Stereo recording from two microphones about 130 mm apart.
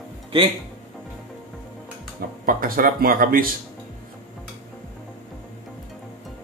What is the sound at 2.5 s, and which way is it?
Speech, 90° right.